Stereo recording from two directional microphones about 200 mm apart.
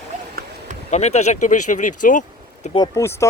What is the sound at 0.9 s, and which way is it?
Speech, 35° left (ahead or behind).